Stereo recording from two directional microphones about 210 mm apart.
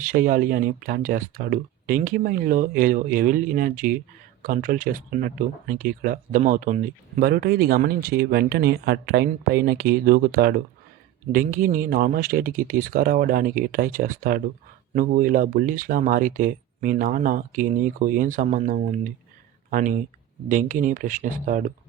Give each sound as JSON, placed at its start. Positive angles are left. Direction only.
{"t": 0.0, "sound": "speech", "side_deg": -40}